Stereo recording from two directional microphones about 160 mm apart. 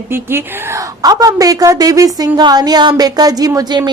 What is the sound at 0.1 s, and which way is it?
A woman's voice, 15° right (ahead or behind).